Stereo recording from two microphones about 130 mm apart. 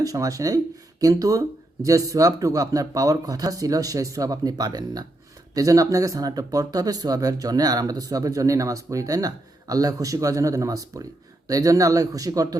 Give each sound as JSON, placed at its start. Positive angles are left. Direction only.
{"t": 0.0, "sound": "speech", "side_deg": -25}